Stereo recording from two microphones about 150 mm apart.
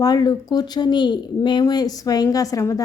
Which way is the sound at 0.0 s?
25° left (ahead or behind).